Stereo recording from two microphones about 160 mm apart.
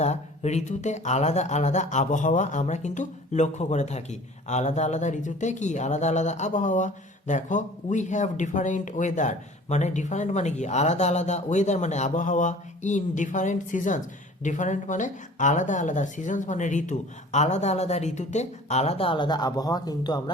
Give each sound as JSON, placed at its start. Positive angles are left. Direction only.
{"t": 0.0, "sound": "speech", "side_deg": 45}